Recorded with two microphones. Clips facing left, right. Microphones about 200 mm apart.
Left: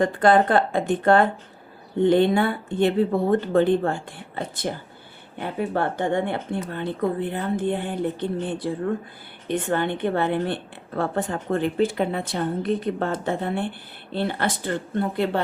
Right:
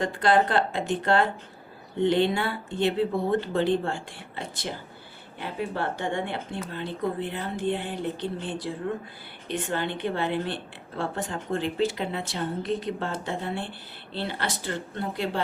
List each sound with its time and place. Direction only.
0.0 s a woman's voice: 50° left (ahead or behind)